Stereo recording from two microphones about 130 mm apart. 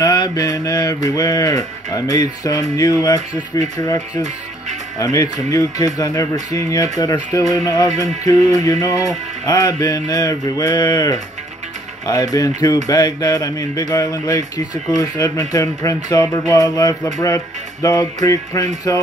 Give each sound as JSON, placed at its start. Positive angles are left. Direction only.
{"t": 0.0, "sound": "mantra", "side_deg": 30}
{"t": 2.8, "sound": "speech", "side_deg": 30}
{"t": 7.9, "sound": "music", "side_deg": -60}
{"t": 8.3, "sound": "speech", "side_deg": 25}